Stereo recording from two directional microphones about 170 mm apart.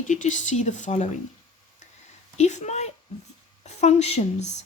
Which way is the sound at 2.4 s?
40° left (ahead or behind).